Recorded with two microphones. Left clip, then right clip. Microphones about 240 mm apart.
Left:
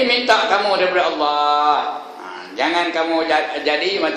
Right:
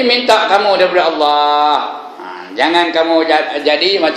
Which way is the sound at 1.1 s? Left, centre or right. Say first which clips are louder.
Right 5 dB; right.